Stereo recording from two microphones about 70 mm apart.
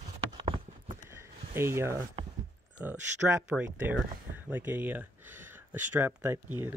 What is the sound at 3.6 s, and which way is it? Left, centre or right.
Speech, right.